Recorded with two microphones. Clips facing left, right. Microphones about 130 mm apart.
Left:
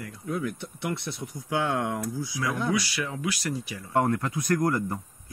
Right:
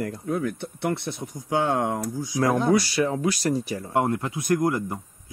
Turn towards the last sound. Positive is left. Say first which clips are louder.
# right 2 dB
turn(degrees=-20)  # may be behind; listen again after turning